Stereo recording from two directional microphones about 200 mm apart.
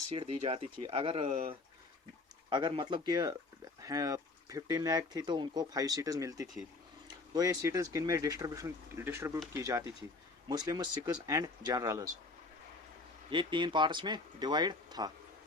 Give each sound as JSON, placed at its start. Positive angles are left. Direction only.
{"t": 0.1, "sound": "speech", "side_deg": -30}
{"t": 2.5, "sound": "speech", "side_deg": -20}
{"t": 13.3, "sound": "speech", "side_deg": -25}